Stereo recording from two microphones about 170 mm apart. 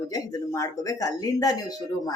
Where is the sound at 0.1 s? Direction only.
20° left (ahead or behind).